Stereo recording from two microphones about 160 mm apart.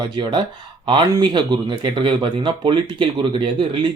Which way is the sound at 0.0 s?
30° right (ahead or behind).